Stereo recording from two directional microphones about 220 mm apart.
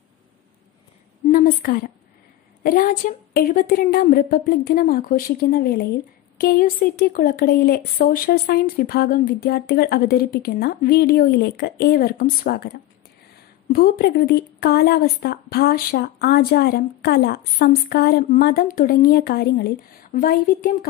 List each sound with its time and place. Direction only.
1.3 s a woman's voice: 40° left (ahead or behind)
13.7 s speech: 40° left (ahead or behind)